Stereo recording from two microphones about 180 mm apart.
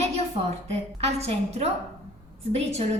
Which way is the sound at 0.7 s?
35° right (ahead or behind).